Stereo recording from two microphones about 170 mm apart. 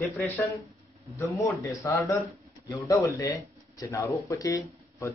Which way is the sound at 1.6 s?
15° left (ahead or behind).